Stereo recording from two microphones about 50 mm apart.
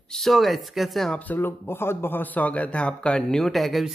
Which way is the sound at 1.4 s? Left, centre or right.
Left.